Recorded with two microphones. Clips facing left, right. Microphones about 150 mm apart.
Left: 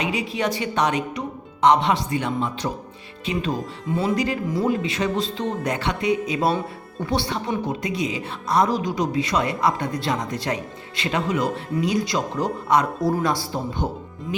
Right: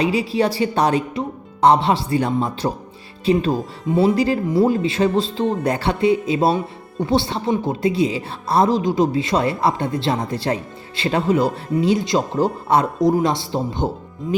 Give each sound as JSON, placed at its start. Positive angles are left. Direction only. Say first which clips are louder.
{"t": 0.0, "sound": "speech", "louder": "right 6 dB", "side_deg": -35}
{"t": 13.0, "sound": "speech", "louder": "right 5 dB", "side_deg": -20}